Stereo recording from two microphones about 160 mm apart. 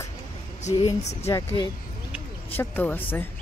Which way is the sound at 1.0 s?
45° left (ahead or behind).